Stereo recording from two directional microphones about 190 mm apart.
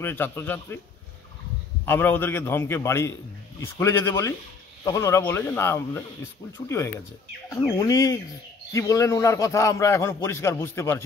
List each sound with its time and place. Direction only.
0.0 s a man's voice: 10° left (ahead or behind)
1.9 s a man's voice: 10° left (ahead or behind)
7.4 s a man's voice: 15° left (ahead or behind)